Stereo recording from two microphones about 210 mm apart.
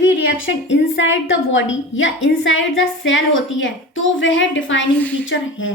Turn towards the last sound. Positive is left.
turn(degrees=65)  # may be behind; listen again after turning